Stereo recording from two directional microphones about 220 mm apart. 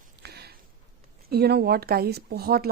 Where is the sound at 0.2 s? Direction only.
45° right (ahead or behind).